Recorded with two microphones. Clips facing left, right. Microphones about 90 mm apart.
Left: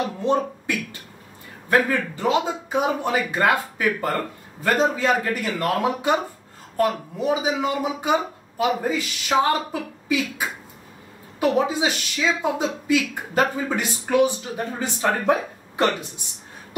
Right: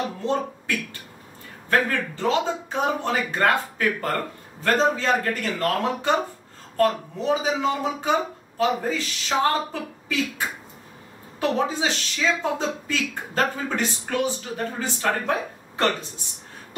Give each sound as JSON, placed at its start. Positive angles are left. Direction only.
{"t": 0.2, "sound": "speech", "side_deg": 15}